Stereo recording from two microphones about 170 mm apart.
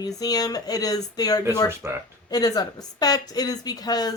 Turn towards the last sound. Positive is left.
turn(degrees=20)  # may be behind; listen again after turning